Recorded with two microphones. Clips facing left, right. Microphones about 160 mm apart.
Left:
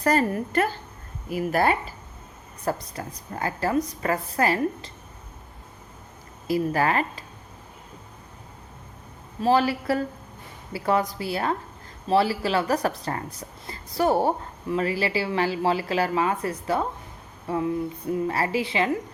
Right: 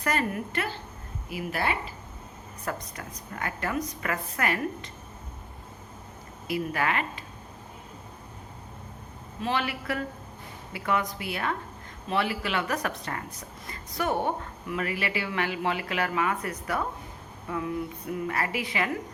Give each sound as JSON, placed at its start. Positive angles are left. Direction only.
{"t": 0.0, "sound": "a woman's voice", "side_deg": 35}
{"t": 6.5, "sound": "a woman's voice", "side_deg": 35}
{"t": 9.4, "sound": "a woman's voice", "side_deg": 35}